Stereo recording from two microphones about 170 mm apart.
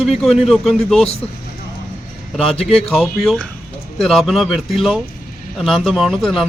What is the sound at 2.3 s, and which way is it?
Speech, 5° left (ahead or behind).